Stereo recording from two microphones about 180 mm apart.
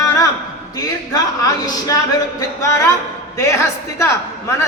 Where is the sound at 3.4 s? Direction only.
15° left (ahead or behind).